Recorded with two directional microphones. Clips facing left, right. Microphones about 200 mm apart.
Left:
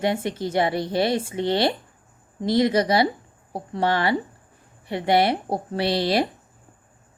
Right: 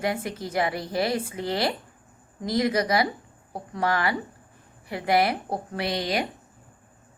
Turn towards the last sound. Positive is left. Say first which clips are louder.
# left 5 dB
turn(degrees=35)  # may be behind; listen again after turning